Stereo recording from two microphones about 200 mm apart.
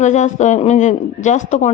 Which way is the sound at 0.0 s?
35° left (ahead or behind).